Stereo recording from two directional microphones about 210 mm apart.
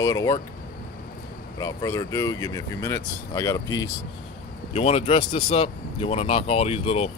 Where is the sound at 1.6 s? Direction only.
15° left (ahead or behind).